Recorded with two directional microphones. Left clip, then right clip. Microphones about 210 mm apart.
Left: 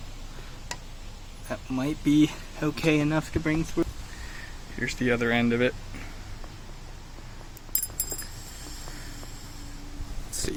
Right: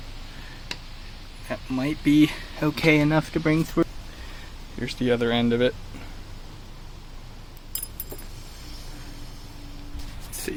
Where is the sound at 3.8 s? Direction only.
50° right (ahead or behind).